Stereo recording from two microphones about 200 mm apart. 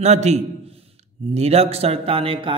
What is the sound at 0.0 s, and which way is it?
Speech, 35° right (ahead or behind).